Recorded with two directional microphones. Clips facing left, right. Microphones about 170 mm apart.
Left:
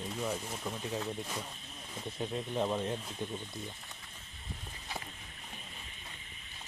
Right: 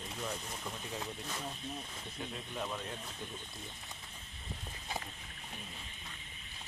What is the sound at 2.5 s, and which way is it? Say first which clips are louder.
Speech: left 8 dB; 30° left (ahead or behind).